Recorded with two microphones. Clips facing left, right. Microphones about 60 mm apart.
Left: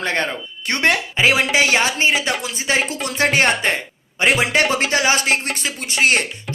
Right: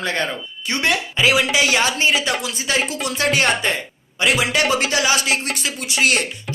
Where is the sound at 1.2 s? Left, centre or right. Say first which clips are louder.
Right 1 dB; left.